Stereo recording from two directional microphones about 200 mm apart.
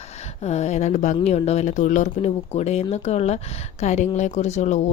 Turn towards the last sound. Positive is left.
turn(degrees=35)  # may be behind; listen again after turning